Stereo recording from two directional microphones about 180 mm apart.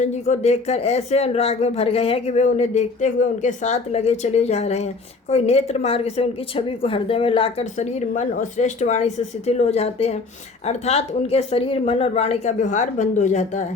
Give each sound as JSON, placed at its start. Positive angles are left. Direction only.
{"t": 0.0, "sound": "speech", "side_deg": 40}